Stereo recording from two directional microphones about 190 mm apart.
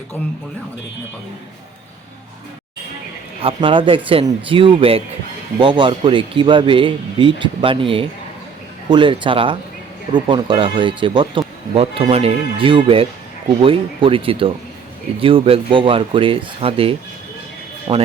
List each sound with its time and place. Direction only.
3.4 s speech: 25° right (ahead or behind)